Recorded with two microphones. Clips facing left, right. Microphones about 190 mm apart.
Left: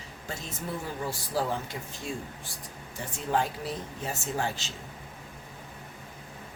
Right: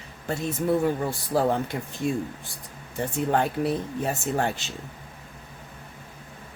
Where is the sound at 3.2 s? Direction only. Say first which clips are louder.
Right 4 dB; 60° right (ahead or behind).